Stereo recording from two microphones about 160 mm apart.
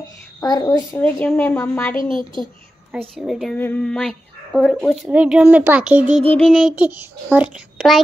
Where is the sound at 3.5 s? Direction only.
10° left (ahead or behind).